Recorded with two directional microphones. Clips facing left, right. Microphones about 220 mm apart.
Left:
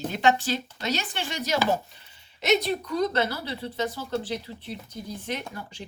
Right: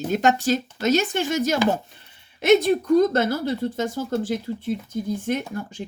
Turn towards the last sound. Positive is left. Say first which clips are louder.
# right 8 dB
turn(degrees=-45)  # may be behind; listen again after turning